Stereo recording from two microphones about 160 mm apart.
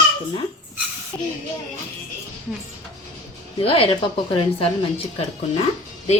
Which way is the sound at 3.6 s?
35° left (ahead or behind).